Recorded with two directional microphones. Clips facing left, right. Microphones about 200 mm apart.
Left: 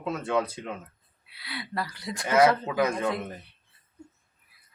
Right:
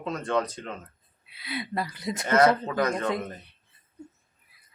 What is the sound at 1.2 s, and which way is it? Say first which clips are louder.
Speech: right 5 dB; 20° right (ahead or behind).